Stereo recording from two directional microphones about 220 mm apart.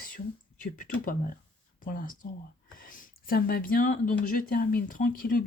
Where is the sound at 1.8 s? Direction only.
40° left (ahead or behind).